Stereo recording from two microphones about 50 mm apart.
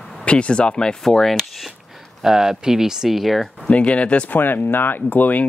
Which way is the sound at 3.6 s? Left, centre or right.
Left.